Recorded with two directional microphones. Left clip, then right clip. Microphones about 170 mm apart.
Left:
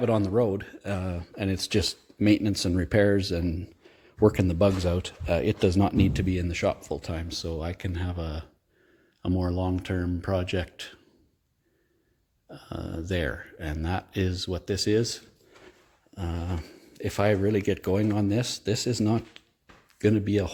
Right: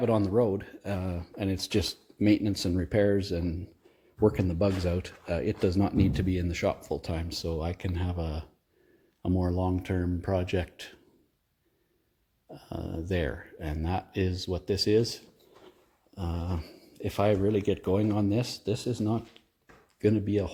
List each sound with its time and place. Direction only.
0.0 s speech: 10° left (ahead or behind)
5.2 s speech: 30° left (ahead or behind); by 11.0 s 10° left (ahead or behind)
12.5 s speech: 10° left (ahead or behind); by 20.5 s 30° left (ahead or behind)